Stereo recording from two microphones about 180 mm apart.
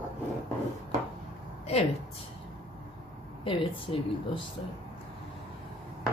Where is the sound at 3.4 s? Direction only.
30° left (ahead or behind).